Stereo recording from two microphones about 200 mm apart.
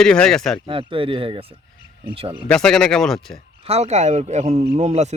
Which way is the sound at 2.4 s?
5° left (ahead or behind).